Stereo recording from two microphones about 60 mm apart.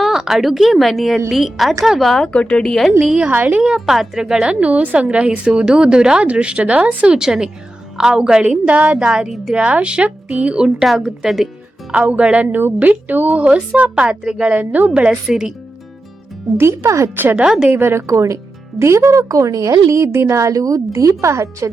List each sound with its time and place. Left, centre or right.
0.0 s a woman's voice: centre
2.3 s speech: centre
3.0 s a woman's voice: centre
3.2 s a woman's voice: right
3.6 s a woman's voice: centre
9.3 s a woman's voice: centre
9.6 s a woman's voice: centre
10.8 s a woman's voice: centre
11.9 s a woman's voice: right
14.5 s speech: right
15.3 s a woman's voice: centre
16.6 s speech: right
17.3 s a woman's voice: centre
17.7 s speech: right